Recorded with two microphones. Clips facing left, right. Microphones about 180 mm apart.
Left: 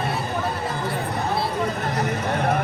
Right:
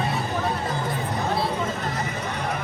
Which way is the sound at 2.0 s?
60° left (ahead or behind).